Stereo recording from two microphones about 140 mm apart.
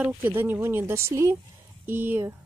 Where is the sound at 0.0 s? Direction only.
10° right (ahead or behind).